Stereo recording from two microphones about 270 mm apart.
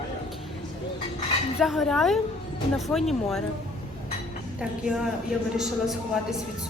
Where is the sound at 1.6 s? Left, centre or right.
Centre.